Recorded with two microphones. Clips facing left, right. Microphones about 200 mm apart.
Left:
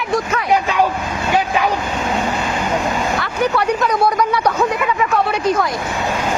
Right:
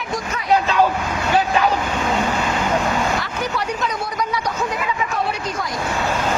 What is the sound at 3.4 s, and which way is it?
Speech, 60° left (ahead or behind).